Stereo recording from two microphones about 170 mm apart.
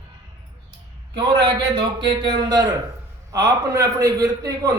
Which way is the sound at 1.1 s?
25° right (ahead or behind).